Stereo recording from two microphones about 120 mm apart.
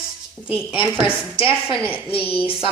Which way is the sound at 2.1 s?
50° left (ahead or behind).